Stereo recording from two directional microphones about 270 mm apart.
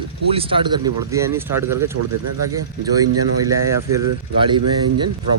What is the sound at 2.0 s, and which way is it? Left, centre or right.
Speech, right.